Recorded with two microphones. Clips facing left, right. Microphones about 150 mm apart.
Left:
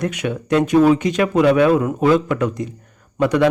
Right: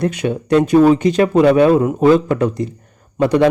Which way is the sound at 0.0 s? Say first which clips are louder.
Right 4 dB; 30° right (ahead or behind).